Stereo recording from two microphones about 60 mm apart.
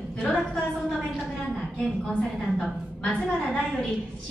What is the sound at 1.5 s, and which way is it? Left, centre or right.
Speech, centre.